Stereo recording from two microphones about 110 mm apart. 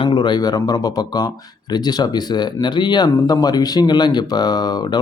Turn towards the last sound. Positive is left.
turn(degrees=40)  # may be behind; listen again after turning